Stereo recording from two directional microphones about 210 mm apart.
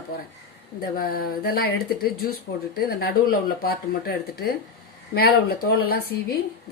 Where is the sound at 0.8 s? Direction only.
45° left (ahead or behind).